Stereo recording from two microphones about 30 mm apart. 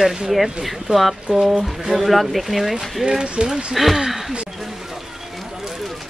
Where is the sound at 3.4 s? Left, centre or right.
Right.